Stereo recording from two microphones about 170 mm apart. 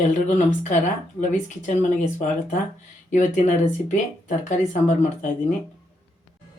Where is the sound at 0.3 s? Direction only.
45° left (ahead or behind).